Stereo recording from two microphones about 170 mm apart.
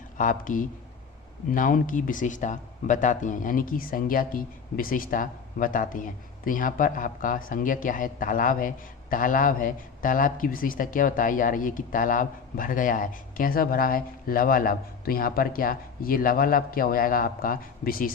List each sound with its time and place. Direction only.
0.2 s a man's voice: 50° left (ahead or behind)